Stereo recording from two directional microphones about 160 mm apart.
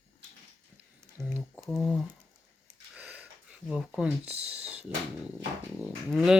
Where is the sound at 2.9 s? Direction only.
10° right (ahead or behind).